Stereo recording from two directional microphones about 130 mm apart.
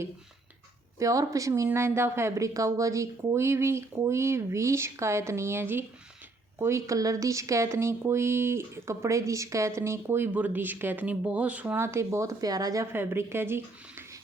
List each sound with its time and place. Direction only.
0.9 s speech: 25° right (ahead or behind)